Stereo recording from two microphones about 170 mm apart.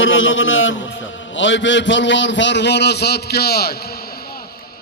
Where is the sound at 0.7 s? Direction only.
90° left; by 3.9 s 65° left (ahead or behind).